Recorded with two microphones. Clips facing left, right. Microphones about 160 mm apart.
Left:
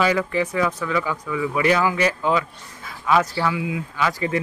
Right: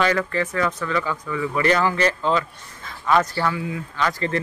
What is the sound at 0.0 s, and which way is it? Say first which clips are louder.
Speech: left 1 dB; 10° left (ahead or behind).